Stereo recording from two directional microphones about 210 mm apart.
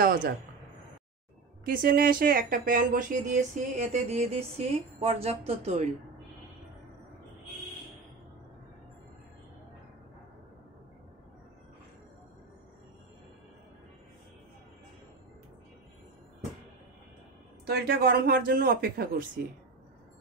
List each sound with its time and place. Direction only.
0.0 s speech: 40° right (ahead or behind)
1.6 s speech: 45° right (ahead or behind)
17.6 s speech: 50° right (ahead or behind)